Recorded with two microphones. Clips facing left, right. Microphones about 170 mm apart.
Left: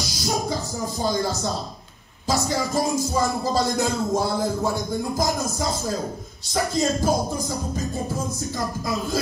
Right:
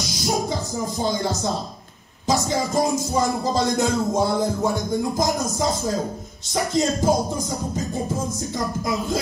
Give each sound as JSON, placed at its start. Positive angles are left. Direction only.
{"t": 0.7, "sound": "speech", "side_deg": -20}
{"t": 2.2, "sound": "music", "side_deg": -20}
{"t": 8.5, "sound": "music", "side_deg": -20}